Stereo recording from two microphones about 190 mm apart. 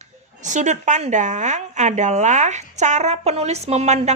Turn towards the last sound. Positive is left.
turn(degrees=-35)  # may be behind; listen again after turning